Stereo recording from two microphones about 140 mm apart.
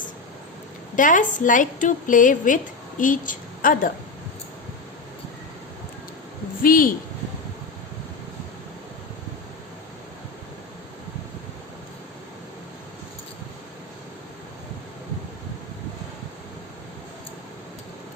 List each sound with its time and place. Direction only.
0.9 s a woman's voice: 70° left (ahead or behind)
6.6 s speech: 90° left